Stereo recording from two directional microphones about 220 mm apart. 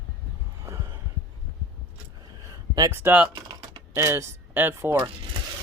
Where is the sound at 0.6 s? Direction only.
15° right (ahead or behind).